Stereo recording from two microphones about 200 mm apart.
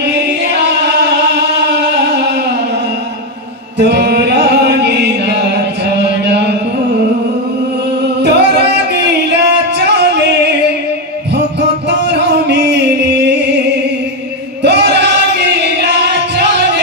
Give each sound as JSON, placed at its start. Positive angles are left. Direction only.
{"t": 3.8, "sound": "music", "side_deg": -55}
{"t": 8.2, "sound": "singing", "side_deg": -60}
{"t": 12.1, "sound": "music", "side_deg": -55}
{"t": 14.6, "sound": "music", "side_deg": -60}